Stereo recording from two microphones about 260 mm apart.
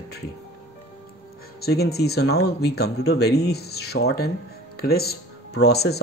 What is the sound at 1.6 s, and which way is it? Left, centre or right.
Speech, left.